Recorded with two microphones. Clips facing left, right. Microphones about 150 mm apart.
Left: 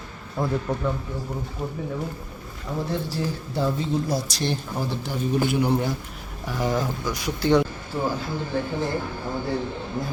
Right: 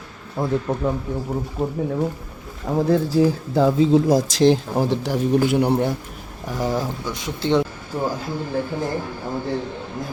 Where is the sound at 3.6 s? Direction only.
90° right; by 5.9 s 70° right (ahead or behind).